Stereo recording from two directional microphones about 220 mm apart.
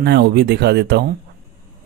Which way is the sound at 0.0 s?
50° right (ahead or behind).